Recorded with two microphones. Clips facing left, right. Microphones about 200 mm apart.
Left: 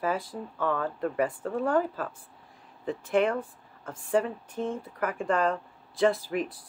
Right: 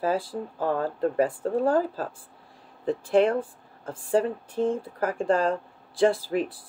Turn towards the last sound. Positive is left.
turn(degrees=-30)  # may be behind; listen again after turning